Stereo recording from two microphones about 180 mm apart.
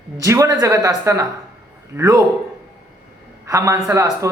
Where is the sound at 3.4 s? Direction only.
20° right (ahead or behind).